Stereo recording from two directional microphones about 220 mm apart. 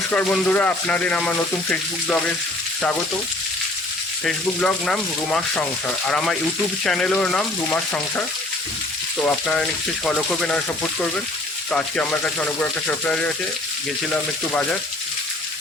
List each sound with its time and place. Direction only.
0.1 s frying: 5° left (ahead or behind)
4.3 s frying: 5° left (ahead or behind)
9.2 s frying: 5° left (ahead or behind)
11.7 s frying: 5° left (ahead or behind)
14.1 s speech: 5° left (ahead or behind)